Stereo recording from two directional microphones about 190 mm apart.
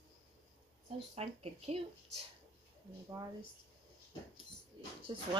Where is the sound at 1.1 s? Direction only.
35° right (ahead or behind).